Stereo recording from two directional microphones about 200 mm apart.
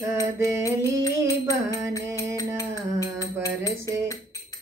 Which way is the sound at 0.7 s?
15° left (ahead or behind).